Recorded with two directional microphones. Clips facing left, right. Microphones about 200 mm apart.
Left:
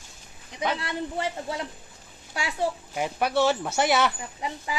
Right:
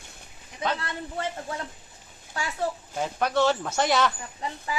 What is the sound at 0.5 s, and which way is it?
Speech, 15° left (ahead or behind).